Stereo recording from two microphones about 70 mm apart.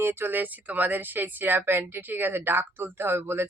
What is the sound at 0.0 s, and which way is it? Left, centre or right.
Speech, right.